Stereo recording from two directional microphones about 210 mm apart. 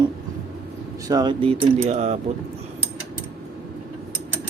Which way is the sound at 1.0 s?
20° right (ahead or behind).